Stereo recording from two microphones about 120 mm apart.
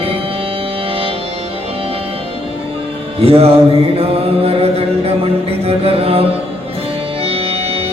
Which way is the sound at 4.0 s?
55° right (ahead or behind).